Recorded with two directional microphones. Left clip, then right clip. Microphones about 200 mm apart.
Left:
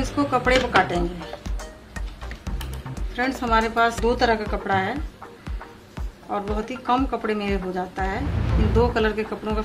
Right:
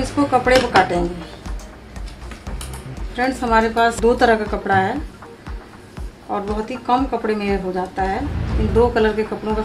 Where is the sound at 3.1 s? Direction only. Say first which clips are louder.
Right 4 dB; 10° left (ahead or behind).